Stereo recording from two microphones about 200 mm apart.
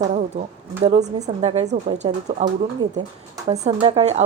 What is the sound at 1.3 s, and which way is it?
Speech, 30° right (ahead or behind).